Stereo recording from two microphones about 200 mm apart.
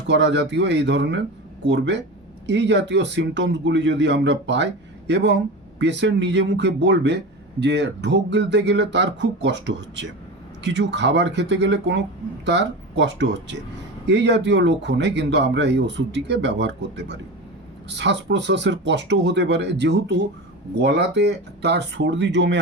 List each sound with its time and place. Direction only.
0.1 s speech: 60° right (ahead or behind)